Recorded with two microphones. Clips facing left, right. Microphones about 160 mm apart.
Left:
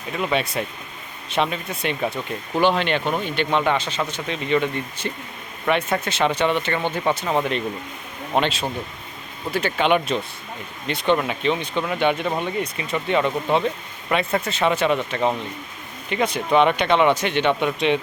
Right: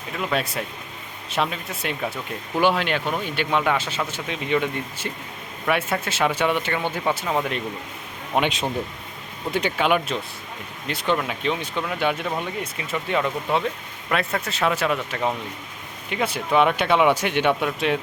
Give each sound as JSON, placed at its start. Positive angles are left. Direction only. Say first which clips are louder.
{"t": 0.1, "sound": "speech", "louder": "left 2 dB", "side_deg": 5}
{"t": 8.4, "sound": "speech", "louder": "even", "side_deg": -15}
{"t": 9.8, "sound": "speech", "louder": "left 4 dB", "side_deg": -5}